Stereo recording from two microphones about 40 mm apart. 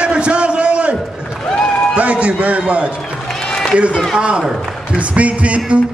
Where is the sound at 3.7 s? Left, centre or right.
Right.